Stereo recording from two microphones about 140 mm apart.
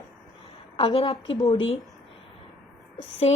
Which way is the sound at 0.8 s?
40° left (ahead or behind).